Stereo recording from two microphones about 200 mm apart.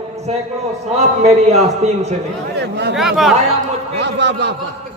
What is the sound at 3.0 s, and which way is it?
Speech, centre (ahead or behind).